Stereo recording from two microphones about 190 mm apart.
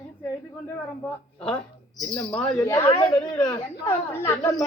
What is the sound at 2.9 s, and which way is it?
Speech, 30° left (ahead or behind).